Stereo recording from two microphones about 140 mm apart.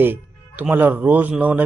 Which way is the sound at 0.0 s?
15° right (ahead or behind).